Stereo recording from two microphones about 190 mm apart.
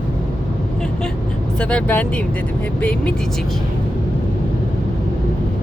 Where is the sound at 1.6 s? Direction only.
5° left (ahead or behind).